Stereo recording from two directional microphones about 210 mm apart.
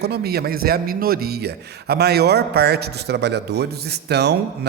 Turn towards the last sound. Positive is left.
turn(degrees=-50)  # may be behind; listen again after turning